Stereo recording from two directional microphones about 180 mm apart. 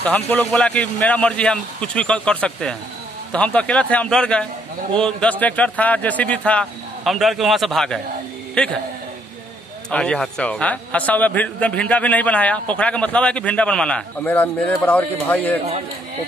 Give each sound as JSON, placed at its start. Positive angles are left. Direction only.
{"t": 0.0, "sound": "a man's voice", "side_deg": 10}
{"t": 9.8, "sound": "a man's voice", "side_deg": 5}